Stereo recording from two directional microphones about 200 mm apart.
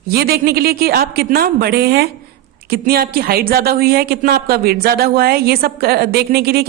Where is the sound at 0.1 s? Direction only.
50° right (ahead or behind).